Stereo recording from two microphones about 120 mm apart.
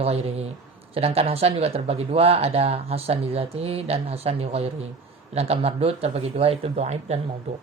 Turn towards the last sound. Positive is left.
turn(degrees=-65)  # may be behind; listen again after turning